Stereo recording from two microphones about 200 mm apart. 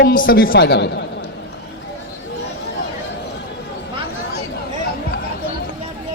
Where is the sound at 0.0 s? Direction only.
45° left (ahead or behind).